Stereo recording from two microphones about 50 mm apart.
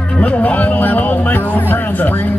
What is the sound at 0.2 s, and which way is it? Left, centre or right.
Speech, left.